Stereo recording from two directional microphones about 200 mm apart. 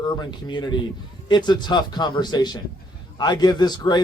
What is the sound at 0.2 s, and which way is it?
A man's voice, 20° left (ahead or behind).